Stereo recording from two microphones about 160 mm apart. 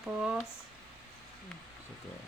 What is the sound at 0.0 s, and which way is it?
Speech, 5° right (ahead or behind).